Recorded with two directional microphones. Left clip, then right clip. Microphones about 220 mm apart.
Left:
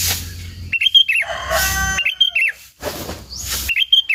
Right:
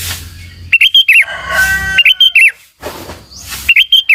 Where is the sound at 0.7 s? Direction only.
20° right (ahead or behind).